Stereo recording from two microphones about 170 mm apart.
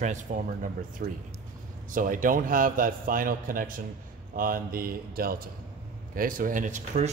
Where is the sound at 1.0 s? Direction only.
60° right (ahead or behind).